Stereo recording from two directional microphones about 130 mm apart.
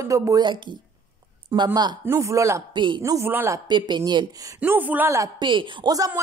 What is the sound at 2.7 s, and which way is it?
Speech, 35° right (ahead or behind).